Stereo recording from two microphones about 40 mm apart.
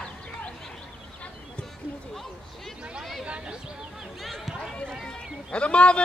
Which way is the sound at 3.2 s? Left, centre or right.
Right.